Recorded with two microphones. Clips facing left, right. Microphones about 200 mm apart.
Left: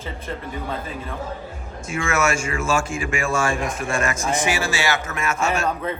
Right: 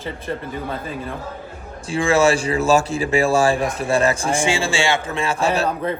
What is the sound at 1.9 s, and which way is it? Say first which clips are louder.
A man's voice: right 6 dB; 30° right (ahead or behind).